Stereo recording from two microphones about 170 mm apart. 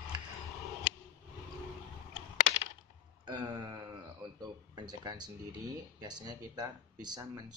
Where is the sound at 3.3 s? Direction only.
25° right (ahead or behind).